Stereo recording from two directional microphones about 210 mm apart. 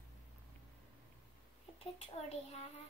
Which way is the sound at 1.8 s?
30° left (ahead or behind).